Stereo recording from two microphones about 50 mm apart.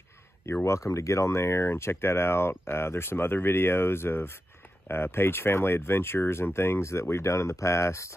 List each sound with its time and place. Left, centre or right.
0.7 s speech: left